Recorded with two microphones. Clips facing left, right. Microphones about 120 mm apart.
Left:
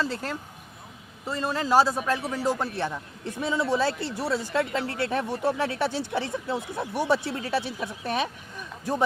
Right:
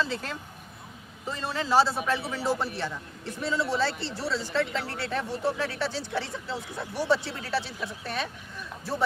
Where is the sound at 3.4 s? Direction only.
15° left (ahead or behind).